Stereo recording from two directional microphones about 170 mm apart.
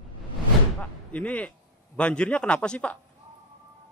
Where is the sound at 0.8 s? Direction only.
10° left (ahead or behind).